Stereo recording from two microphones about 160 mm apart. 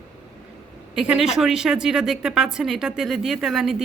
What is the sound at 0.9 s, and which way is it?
A woman's voice, 5° right (ahead or behind).